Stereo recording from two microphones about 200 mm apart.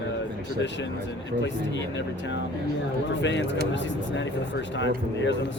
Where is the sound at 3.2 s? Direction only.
65° left (ahead or behind).